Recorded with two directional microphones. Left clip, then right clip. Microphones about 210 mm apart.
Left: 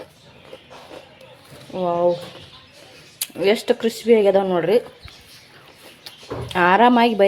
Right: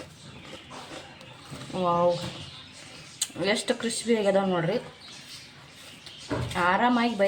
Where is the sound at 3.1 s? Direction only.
25° left (ahead or behind).